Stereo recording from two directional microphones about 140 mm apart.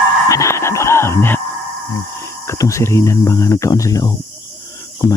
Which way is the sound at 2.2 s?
20° left (ahead or behind).